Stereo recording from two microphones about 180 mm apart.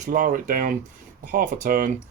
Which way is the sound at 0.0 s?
50° right (ahead or behind).